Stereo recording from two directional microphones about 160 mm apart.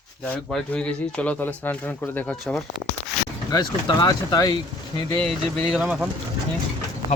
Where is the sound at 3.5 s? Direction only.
25° left (ahead or behind).